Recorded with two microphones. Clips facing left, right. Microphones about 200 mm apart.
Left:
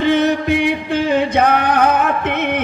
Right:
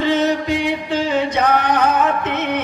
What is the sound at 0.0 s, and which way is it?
Music, 60° left (ahead or behind).